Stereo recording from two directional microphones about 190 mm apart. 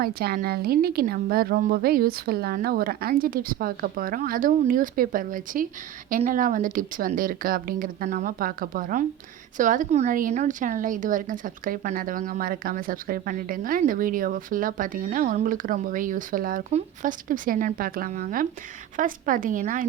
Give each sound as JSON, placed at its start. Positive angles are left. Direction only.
{"t": 0.0, "sound": "a woman's voice", "side_deg": -55}